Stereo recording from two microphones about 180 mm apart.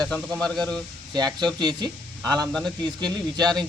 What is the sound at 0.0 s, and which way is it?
Speech, 5° left (ahead or behind).